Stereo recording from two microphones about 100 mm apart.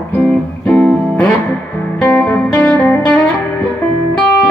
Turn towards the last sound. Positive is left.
turn(degrees=15)  # may be behind; listen again after turning